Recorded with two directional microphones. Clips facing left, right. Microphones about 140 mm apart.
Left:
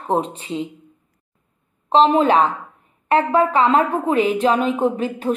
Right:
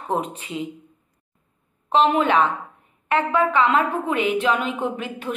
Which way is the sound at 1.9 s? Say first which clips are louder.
Left 4 dB; 35° left (ahead or behind).